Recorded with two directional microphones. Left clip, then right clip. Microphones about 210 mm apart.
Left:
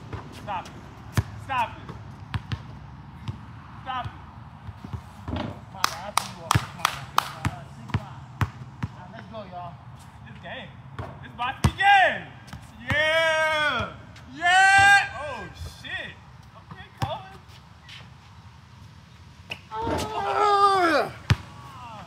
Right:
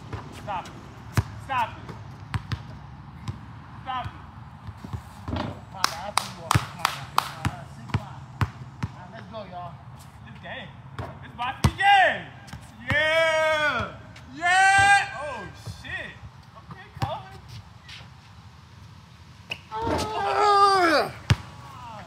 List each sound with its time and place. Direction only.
0.5 s speech: 15° left (ahead or behind)
1.2 s basketball bounce: 20° right (ahead or behind)
3.9 s speech: 15° left (ahead or behind)
5.7 s whip: 30° right (ahead or behind)
6.1 s a sound: 20° left (ahead or behind)
7.9 s basketball bounce: 15° right (ahead or behind)
8.4 s basketball bounce: 20° left (ahead or behind)
8.7 s basketball bounce: 15° right (ahead or behind)
10.4 s speech: 15° left (ahead or behind)
11.2 s basketball bounce: 20° left (ahead or behind)
11.7 s chop: 20° left (ahead or behind)
12.8 s a sound: 20° left (ahead or behind)
17.0 s basketball bounce: 25° left (ahead or behind)
19.7 s basketball bounce: 20° right (ahead or behind)